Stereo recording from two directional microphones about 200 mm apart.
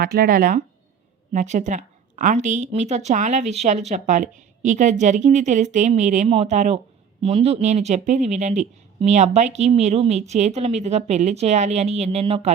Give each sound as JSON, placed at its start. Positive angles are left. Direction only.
{"t": 0.0, "sound": "a woman's voice", "side_deg": -45}